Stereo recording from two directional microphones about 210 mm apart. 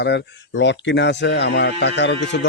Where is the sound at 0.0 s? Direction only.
55° left (ahead or behind).